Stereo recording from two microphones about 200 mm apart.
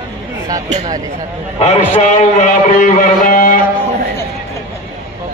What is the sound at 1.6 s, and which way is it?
A man's voice, 35° left (ahead or behind).